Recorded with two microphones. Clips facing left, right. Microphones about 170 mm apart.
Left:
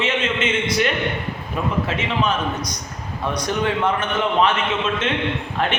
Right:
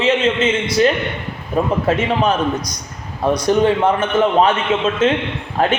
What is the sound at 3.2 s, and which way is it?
A man's voice, 35° right (ahead or behind).